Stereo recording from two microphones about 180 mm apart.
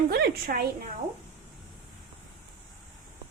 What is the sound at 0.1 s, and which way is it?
Speech, 55° right (ahead or behind).